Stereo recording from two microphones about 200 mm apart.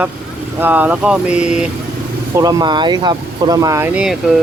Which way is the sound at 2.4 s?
20° right (ahead or behind).